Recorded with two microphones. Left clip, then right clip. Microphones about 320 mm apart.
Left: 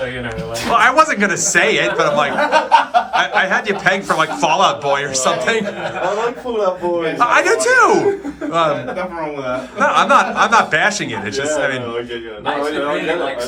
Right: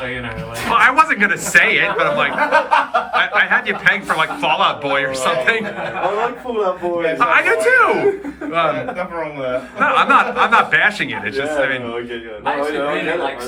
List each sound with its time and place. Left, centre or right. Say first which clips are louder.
0.7 s a man's voice: even; centre
7.2 s a man's voice: left 1 dB; centre
9.8 s a man's voice: left 1 dB; centre